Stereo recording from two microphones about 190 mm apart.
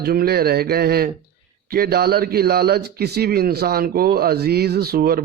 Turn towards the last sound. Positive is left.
turn(degrees=-55)  # may be behind; listen again after turning